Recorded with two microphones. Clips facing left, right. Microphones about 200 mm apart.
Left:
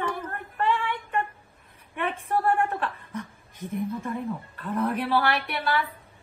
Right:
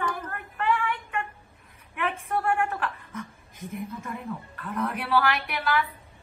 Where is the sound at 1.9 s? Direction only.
30° left (ahead or behind).